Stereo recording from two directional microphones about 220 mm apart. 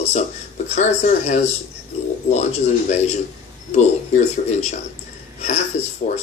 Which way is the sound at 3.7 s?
30° left (ahead or behind).